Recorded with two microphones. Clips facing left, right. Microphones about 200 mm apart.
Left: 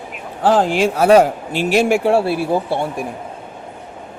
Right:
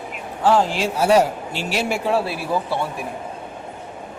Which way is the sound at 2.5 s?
25° left (ahead or behind).